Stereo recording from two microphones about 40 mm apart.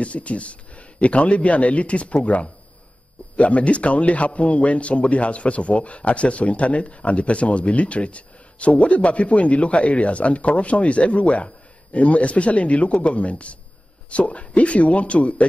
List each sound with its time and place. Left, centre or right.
0.0 s a man's voice: left